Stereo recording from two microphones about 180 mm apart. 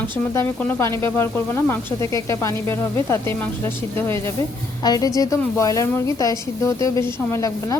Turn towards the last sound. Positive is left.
turn(degrees=20)  # may be behind; listen again after turning